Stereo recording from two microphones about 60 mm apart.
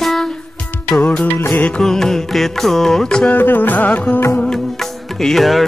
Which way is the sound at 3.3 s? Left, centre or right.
Left.